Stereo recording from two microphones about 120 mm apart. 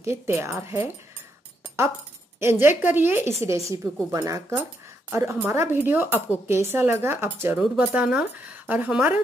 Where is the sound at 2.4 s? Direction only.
20° right (ahead or behind).